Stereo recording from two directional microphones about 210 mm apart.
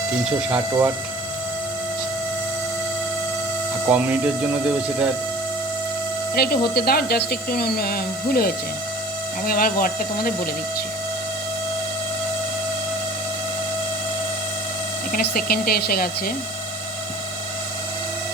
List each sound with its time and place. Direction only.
0.3 s speech: 10° right (ahead or behind)
3.8 s speech: 5° right (ahead or behind)
6.3 s speech: 45° left (ahead or behind)
15.1 s speech: 45° left (ahead or behind)